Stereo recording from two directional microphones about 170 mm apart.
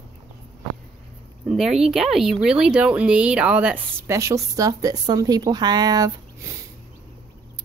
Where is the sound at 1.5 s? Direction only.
5° right (ahead or behind); by 6.5 s 20° right (ahead or behind).